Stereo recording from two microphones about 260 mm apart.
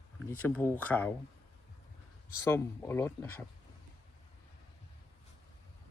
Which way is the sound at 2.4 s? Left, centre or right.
Centre.